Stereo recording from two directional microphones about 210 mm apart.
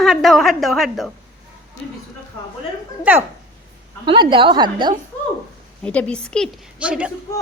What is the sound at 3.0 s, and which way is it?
Speech, 10° right (ahead or behind).